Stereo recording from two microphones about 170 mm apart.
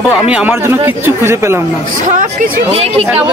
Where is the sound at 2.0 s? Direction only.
50° right (ahead or behind).